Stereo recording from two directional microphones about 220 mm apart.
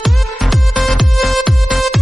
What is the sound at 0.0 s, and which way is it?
Music, centre (ahead or behind).